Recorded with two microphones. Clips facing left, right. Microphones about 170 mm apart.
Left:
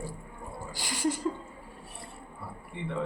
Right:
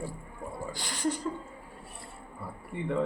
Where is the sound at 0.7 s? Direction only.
5° left (ahead or behind).